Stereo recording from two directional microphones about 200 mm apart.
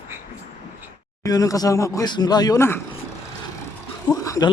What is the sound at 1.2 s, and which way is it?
Speech, 15° left (ahead or behind).